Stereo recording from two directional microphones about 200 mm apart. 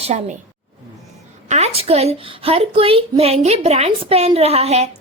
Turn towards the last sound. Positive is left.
turn(degrees=-30)  # may be behind; listen again after turning